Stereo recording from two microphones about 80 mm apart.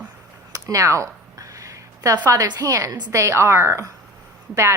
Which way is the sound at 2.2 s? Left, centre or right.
Right.